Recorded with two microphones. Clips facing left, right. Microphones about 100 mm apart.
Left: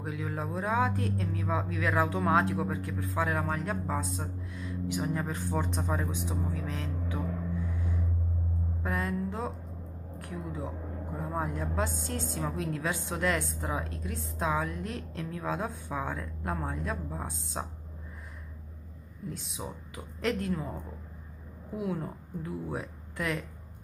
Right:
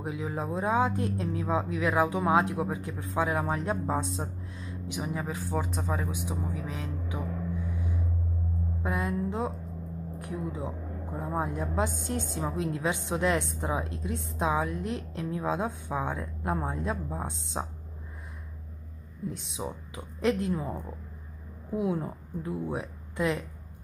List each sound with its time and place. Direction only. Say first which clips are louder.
0.0 s a woman's voice: right 2 dB; 20° right (ahead or behind)
5.1 s speech: even; 5° right (ahead or behind)
6.2 s speech: even; 15° right (ahead or behind)
8.8 s a woman's voice: right 2 dB; 15° right (ahead or behind)
19.3 s a woman's voice: right 3 dB; 25° right (ahead or behind)
21.7 s speech: right 4 dB; 20° right (ahead or behind)